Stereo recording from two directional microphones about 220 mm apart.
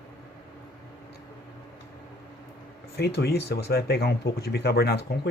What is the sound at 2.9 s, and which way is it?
Speech, 45° left (ahead or behind).